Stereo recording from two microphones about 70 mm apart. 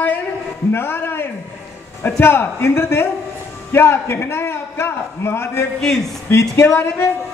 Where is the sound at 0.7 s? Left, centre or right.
Left.